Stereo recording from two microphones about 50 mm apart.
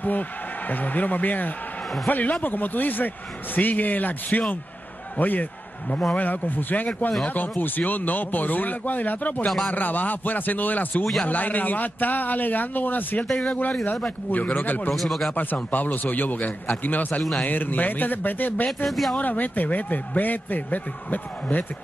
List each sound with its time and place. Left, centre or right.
0.7 s a man's voice: left
13.3 s speech: centre
14.3 s a man's voice: left
15.0 s speech: centre
15.3 s a man's voice: left
18.9 s speech: centre
19.1 s a man's voice: left